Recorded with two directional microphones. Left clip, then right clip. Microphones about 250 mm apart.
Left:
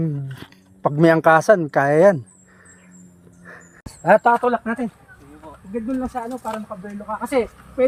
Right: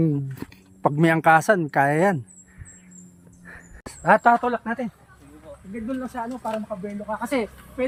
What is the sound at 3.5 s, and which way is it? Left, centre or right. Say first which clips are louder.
Dog: left 2 dB; centre.